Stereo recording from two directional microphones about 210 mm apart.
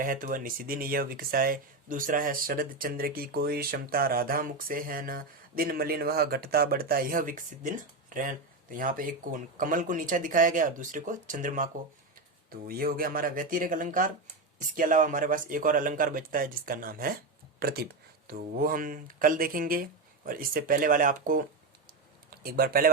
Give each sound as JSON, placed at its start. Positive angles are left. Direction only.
{"t": 0.0, "sound": "speech", "side_deg": -40}